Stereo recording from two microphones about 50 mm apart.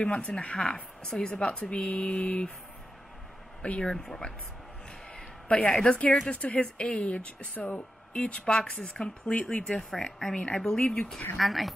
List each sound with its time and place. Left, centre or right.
0.0 s speech: left
3.8 s speech: centre
5.1 s speech: left
11.3 s speech: centre